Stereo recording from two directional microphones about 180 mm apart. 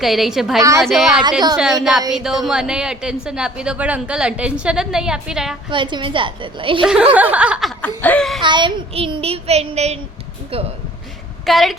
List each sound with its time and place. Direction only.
0.0 s a woman's voice: centre (ahead or behind)
5.7 s a woman's voice: 25° right (ahead or behind)
6.8 s speech: 5° right (ahead or behind)
7.8 s laughter: 10° left (ahead or behind)
8.4 s child singing: 25° right (ahead or behind)
11.4 s a woman's voice: centre (ahead or behind)